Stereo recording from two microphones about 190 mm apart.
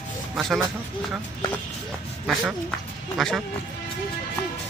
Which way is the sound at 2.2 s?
Centre (ahead or behind).